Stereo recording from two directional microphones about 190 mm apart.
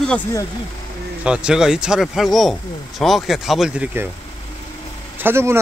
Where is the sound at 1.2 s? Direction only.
5° right (ahead or behind).